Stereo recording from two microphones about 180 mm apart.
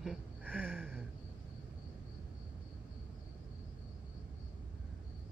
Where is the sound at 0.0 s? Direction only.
5° right (ahead or behind).